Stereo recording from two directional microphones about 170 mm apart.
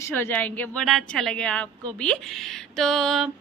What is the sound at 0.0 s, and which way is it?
A woman's voice, 15° left (ahead or behind).